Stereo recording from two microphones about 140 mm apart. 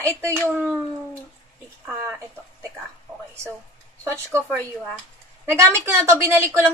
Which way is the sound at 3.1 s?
10° right (ahead or behind).